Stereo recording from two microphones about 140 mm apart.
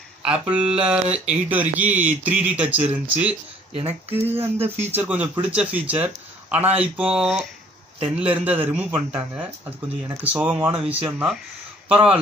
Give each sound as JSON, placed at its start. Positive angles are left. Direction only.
{"t": 0.2, "sound": "speech", "side_deg": -5}
{"t": 1.0, "sound": "speech", "side_deg": -50}
{"t": 1.3, "sound": "speech", "side_deg": -10}